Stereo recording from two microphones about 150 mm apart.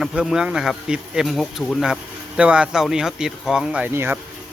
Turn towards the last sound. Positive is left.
turn(degrees=-15)  # may be behind; listen again after turning